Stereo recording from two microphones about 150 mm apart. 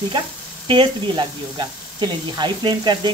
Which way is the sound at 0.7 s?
30° right (ahead or behind).